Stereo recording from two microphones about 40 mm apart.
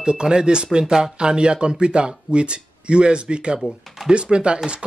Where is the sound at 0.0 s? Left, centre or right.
Right.